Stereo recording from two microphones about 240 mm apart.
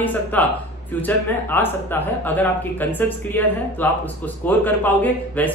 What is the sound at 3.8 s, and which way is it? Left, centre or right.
Speech, centre.